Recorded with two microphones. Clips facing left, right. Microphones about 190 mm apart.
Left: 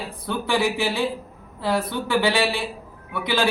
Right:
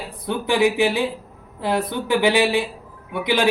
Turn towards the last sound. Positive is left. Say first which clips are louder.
# right 3 dB
turn(degrees=-15)  # may be behind; listen again after turning